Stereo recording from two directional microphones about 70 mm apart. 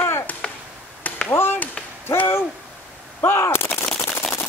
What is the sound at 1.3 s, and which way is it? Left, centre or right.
Gunshot, left.